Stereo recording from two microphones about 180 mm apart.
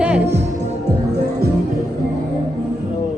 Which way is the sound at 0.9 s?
65° right (ahead or behind).